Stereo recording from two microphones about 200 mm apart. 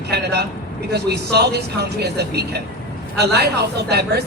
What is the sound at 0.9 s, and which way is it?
A woman's voice, 55° right (ahead or behind).